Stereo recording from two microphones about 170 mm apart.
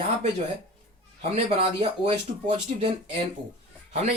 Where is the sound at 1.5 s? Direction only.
35° right (ahead or behind).